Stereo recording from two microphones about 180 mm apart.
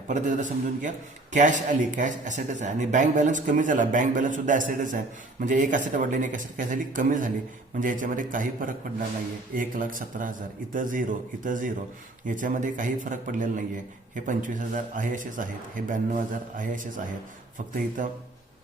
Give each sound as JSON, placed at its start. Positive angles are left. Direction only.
{"t": 0.1, "sound": "a man's voice", "side_deg": -45}